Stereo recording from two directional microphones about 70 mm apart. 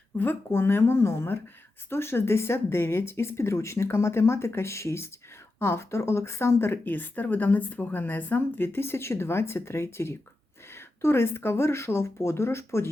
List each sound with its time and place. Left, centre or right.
0.2 s speech: left